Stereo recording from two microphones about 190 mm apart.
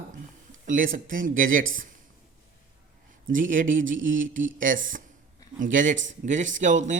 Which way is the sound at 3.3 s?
45° right (ahead or behind).